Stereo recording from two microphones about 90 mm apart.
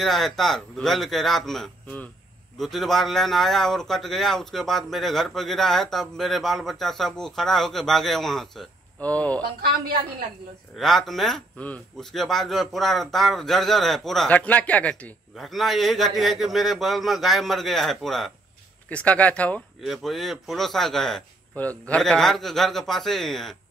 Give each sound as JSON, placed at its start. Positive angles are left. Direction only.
{"t": 0.0, "sound": "speech", "side_deg": 0}
{"t": 9.0, "sound": "speech", "side_deg": 15}
{"t": 10.8, "sound": "speech", "side_deg": 5}
{"t": 11.5, "sound": "speech", "side_deg": 15}
{"t": 12.0, "sound": "speech", "side_deg": 0}
{"t": 14.3, "sound": "speech", "side_deg": 15}
{"t": 15.3, "sound": "speech", "side_deg": 0}
{"t": 18.9, "sound": "speech", "side_deg": 15}
{"t": 19.8, "sound": "speech", "side_deg": 0}
{"t": 21.5, "sound": "speech", "side_deg": 15}
{"t": 22.0, "sound": "speech", "side_deg": 5}